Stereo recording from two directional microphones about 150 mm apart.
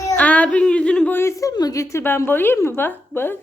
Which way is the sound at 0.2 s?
10° left (ahead or behind).